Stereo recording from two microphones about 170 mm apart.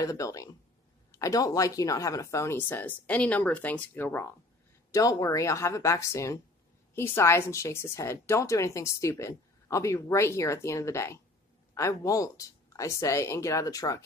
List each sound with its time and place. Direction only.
0.0 s speech: 20° left (ahead or behind)